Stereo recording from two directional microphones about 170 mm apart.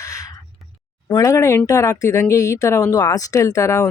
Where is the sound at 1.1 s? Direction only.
20° left (ahead or behind).